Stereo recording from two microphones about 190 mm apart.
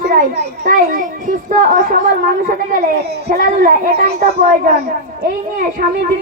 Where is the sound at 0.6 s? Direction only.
45° right (ahead or behind).